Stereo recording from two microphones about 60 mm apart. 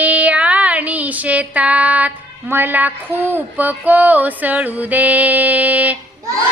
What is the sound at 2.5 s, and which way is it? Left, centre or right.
Speech, right.